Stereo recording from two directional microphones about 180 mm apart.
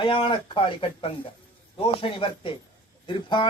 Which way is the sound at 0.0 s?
30° left (ahead or behind).